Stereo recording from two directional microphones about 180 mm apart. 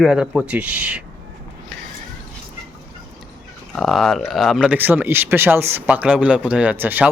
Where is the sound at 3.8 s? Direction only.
Centre (ahead or behind).